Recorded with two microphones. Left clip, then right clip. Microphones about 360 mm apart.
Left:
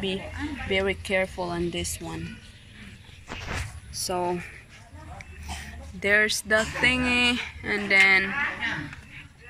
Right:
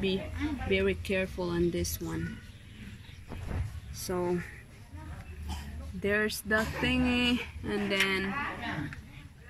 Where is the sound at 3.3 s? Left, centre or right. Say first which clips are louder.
Left 11 dB; left.